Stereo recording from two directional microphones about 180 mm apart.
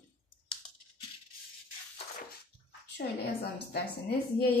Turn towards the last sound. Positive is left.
turn(degrees=65)  # may be behind; listen again after turning